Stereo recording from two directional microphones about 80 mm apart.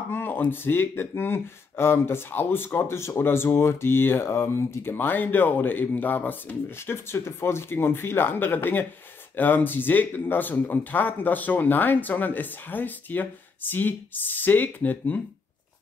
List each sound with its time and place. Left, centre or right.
0.1 s speech: left
4.9 s speech: left